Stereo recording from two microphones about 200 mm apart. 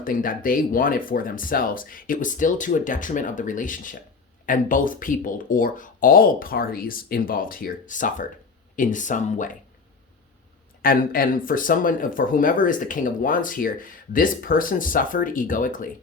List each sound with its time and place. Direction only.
0.0 s speech: 45° left (ahead or behind)
10.8 s speech: 45° left (ahead or behind)